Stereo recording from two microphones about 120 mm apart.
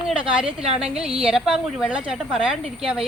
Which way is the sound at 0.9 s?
5° right (ahead or behind).